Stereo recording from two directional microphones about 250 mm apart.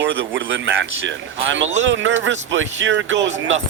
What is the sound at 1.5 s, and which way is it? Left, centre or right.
Speech, right.